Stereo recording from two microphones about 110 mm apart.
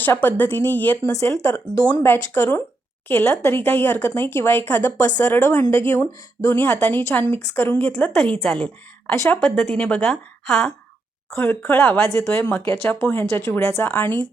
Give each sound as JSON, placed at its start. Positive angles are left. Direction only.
{"t": 0.0, "sound": "a woman's voice", "side_deg": 15}
{"t": 1.0, "sound": "a woman's voice", "side_deg": 25}
{"t": 10.4, "sound": "speech", "side_deg": 5}
{"t": 11.3, "sound": "a woman's voice", "side_deg": 20}